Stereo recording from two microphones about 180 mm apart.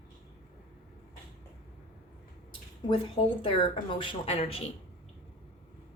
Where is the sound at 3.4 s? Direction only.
30° left (ahead or behind).